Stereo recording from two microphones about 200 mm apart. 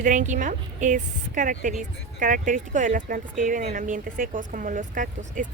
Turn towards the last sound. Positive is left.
turn(degrees=-40)  # may be behind; listen again after turning